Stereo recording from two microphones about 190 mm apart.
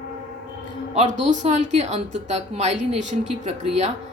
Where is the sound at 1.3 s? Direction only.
35° right (ahead or behind).